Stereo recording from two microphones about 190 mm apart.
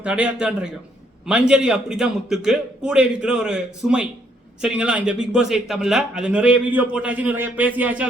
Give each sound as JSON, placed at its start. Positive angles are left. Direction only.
{"t": 0.0, "sound": "a man's voice", "side_deg": -5}